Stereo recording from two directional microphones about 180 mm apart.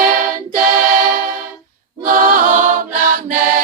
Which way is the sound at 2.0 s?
50° right (ahead or behind).